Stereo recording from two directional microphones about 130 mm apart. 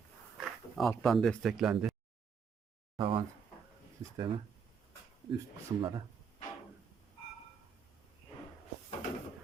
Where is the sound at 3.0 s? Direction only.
40° right (ahead or behind).